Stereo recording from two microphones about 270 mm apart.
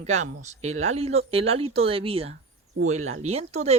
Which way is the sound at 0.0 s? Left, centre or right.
Right.